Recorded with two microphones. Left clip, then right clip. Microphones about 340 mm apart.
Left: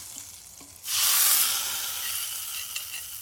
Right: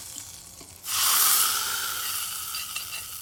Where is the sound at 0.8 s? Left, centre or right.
Centre.